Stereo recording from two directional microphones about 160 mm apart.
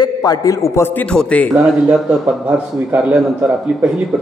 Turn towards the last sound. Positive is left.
turn(degrees=-5)  # may be behind; listen again after turning